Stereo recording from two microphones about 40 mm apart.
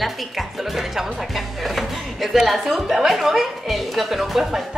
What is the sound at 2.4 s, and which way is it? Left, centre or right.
Speech, centre.